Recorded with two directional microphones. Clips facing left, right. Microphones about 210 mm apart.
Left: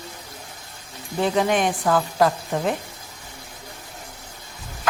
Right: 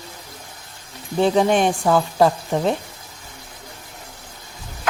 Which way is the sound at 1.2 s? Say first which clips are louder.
Right 4 dB; 30° right (ahead or behind).